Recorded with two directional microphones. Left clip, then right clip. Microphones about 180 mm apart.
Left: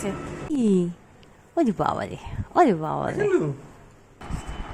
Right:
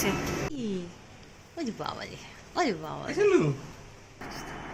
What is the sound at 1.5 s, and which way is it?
Speech, 60° left (ahead or behind).